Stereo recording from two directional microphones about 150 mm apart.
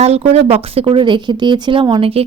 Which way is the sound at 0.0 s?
45° right (ahead or behind).